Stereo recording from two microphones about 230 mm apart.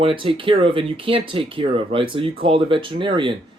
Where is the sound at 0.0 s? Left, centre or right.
Right.